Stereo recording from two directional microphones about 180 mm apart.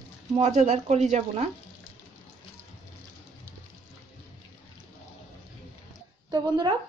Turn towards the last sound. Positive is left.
turn(degrees=-20)  # may be behind; listen again after turning